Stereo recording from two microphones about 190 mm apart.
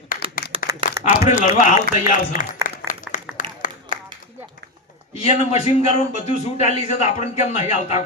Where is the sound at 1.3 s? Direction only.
40° left (ahead or behind).